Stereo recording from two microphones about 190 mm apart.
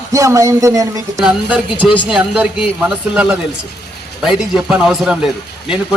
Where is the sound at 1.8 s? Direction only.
Centre (ahead or behind).